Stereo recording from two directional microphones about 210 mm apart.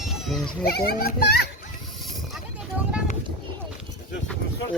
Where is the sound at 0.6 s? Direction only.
45° left (ahead or behind).